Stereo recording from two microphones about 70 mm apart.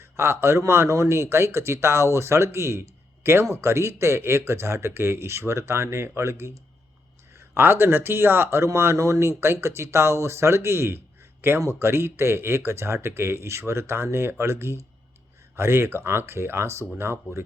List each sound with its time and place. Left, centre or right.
0.0 s speech: right